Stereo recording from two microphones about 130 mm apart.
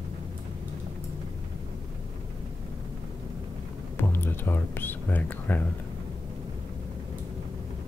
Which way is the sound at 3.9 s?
15° left (ahead or behind).